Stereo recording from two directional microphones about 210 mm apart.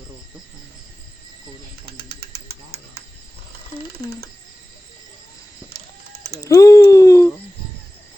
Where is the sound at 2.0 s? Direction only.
50° right (ahead or behind).